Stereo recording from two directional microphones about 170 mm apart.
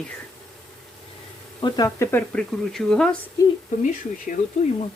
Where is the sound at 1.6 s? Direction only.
25° left (ahead or behind); by 3.2 s 5° left (ahead or behind).